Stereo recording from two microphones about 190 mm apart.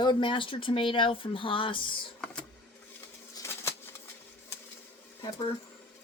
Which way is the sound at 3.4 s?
15° left (ahead or behind).